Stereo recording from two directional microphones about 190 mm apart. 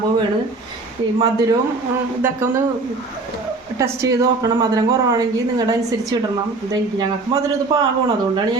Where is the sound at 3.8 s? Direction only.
15° right (ahead or behind).